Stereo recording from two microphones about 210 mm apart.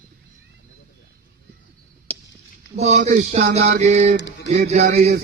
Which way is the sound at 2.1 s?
5° left (ahead or behind).